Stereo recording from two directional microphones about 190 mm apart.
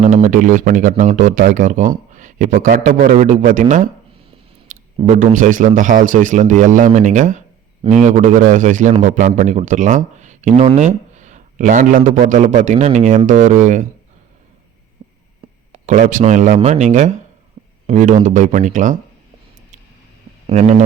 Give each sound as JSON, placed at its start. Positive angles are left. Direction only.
{"t": 0.0, "sound": "speech", "side_deg": -40}
{"t": 4.9, "sound": "a man's voice", "side_deg": -40}
{"t": 15.0, "sound": "hum", "side_deg": -25}
{"t": 15.7, "sound": "a man's voice", "side_deg": -40}
{"t": 20.5, "sound": "a man's voice", "side_deg": -35}